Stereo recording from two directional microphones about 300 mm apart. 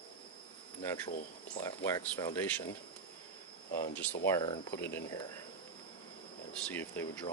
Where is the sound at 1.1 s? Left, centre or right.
Left.